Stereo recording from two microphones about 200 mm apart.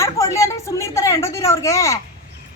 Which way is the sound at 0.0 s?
15° left (ahead or behind).